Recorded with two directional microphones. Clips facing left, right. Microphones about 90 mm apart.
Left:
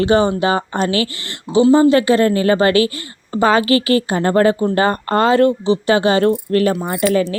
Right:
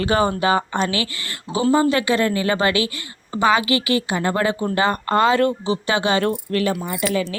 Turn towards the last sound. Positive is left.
turn(degrees=45)  # may be behind; listen again after turning